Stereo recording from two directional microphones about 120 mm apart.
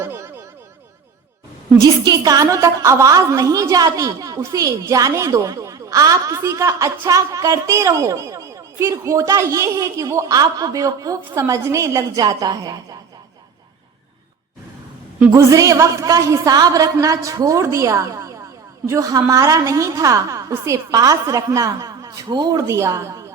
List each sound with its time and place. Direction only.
0.0 s a sound: 20° right (ahead or behind)
1.8 s a woman's voice: 30° right (ahead or behind)
15.3 s a woman's voice: 25° right (ahead or behind)